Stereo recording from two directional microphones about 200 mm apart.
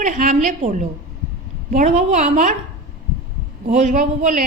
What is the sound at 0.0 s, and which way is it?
A woman's voice, 40° right (ahead or behind).